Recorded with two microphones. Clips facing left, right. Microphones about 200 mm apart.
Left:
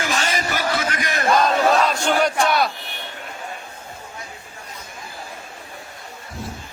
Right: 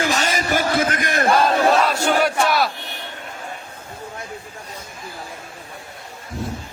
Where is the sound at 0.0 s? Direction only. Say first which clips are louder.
Right 2 dB; 40° right (ahead or behind).